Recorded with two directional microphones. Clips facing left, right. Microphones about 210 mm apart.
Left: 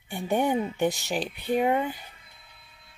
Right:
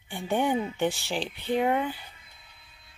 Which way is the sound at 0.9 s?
40° left (ahead or behind).